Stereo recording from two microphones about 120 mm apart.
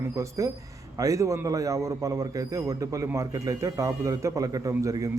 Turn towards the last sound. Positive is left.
turn(degrees=-30)  # may be behind; listen again after turning